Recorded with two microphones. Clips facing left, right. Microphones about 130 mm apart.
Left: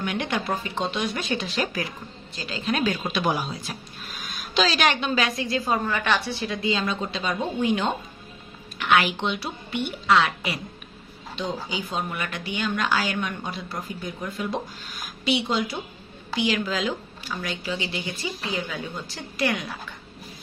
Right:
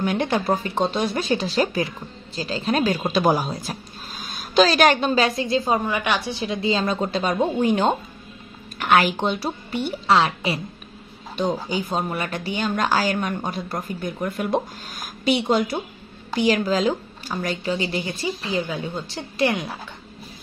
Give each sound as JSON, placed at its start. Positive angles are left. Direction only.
{"t": 0.0, "sound": "speech", "side_deg": -35}
{"t": 5.1, "sound": "a woman's voice", "side_deg": -30}
{"t": 6.7, "sound": "speech", "side_deg": -40}
{"t": 11.3, "sound": "speech", "side_deg": -45}